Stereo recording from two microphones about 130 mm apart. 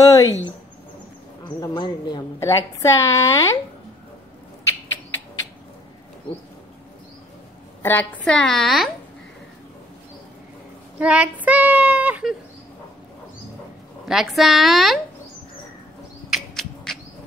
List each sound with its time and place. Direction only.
0.0 s a sound: 25° left (ahead or behind)
1.4 s speech: 35° left (ahead or behind)
2.4 s a woman's voice: 20° left (ahead or behind)
7.8 s a woman's voice: 15° left (ahead or behind)
11.0 s child singing: 10° right (ahead or behind)
14.0 s a woman's voice: 5° right (ahead or behind)
16.3 s a sound: centre (ahead or behind)